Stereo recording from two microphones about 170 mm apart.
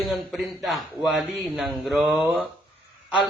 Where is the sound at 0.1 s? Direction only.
Centre (ahead or behind).